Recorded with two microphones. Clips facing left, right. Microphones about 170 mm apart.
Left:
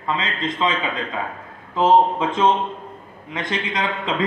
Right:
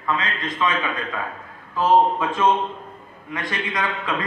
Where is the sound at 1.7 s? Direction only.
20° left (ahead or behind).